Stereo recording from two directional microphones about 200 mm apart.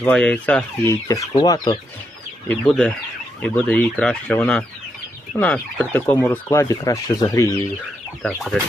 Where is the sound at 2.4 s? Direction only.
5° left (ahead or behind).